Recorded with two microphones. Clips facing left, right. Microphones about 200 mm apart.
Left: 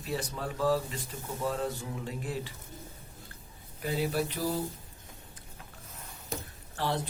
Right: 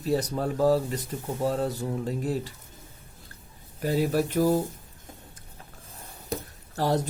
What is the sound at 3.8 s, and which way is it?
Speech, 45° right (ahead or behind).